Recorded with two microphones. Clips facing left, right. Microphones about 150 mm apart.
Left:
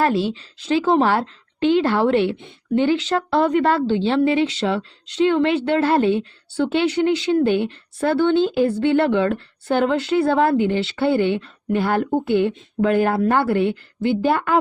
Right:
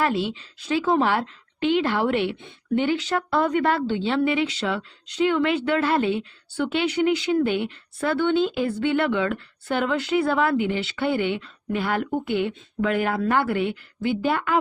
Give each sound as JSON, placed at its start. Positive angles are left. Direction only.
{"t": 0.0, "sound": "a woman's voice", "side_deg": 30}